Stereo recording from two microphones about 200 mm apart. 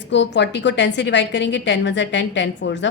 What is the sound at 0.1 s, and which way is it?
Speech, 60° left (ahead or behind).